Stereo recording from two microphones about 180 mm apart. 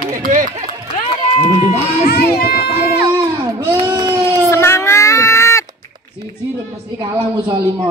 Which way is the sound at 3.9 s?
20° right (ahead or behind).